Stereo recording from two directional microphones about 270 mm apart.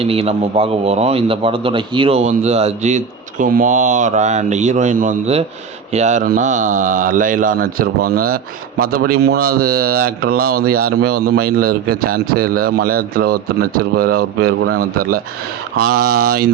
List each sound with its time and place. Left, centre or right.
0.0 s a man's voice: right
14.7 s speech: right
16.0 s a man's voice: right